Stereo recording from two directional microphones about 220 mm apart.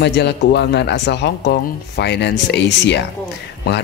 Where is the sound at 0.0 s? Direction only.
50° left (ahead or behind).